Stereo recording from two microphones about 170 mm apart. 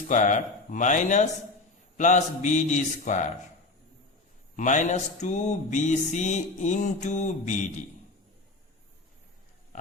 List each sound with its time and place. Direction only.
0.1 s music: 45° left (ahead or behind)
4.5 s music: 45° left (ahead or behind)